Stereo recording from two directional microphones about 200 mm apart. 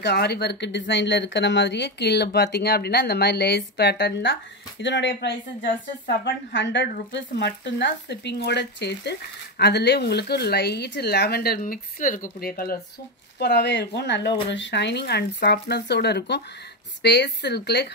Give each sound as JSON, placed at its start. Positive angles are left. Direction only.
{"t": 0.0, "sound": "speech", "side_deg": 55}